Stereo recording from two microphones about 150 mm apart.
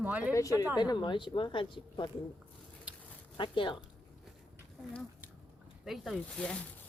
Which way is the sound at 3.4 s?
35° left (ahead or behind).